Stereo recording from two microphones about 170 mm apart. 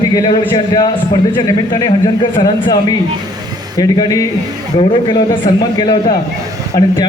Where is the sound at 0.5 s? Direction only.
25° left (ahead or behind).